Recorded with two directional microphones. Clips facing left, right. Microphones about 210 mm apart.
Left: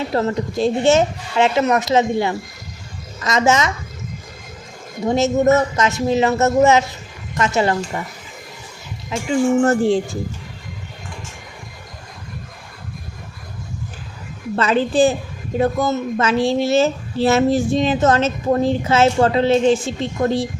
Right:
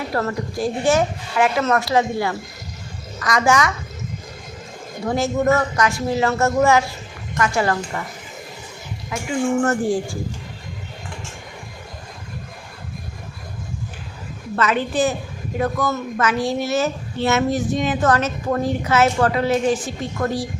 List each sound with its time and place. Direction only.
0.1 s speech: 20° left (ahead or behind)
5.0 s speech: 20° left (ahead or behind)
9.1 s speech: 20° left (ahead or behind)
14.5 s speech: 30° left (ahead or behind)